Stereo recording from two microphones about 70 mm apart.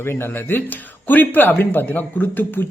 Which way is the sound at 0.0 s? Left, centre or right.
Left.